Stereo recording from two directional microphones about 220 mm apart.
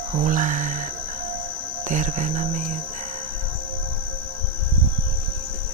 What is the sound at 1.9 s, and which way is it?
Speech, 35° right (ahead or behind).